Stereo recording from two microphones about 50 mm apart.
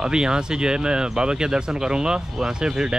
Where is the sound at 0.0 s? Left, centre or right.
Centre.